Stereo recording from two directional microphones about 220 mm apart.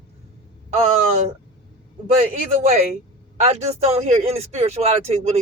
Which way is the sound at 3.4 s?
30° right (ahead or behind).